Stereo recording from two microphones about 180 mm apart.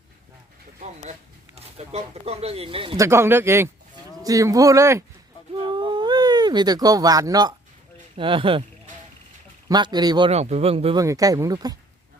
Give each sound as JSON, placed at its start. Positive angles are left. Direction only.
{"t": 1.5, "sound": "speech", "side_deg": -35}
{"t": 3.0, "sound": "a man's voice", "side_deg": -15}
{"t": 5.6, "sound": "a sound", "side_deg": -25}
{"t": 8.1, "sound": "a man's voice", "side_deg": -30}
{"t": 9.6, "sound": "a man's voice", "side_deg": -25}
{"t": 10.3, "sound": "speech", "side_deg": -35}
{"t": 10.9, "sound": "a man's voice", "side_deg": -20}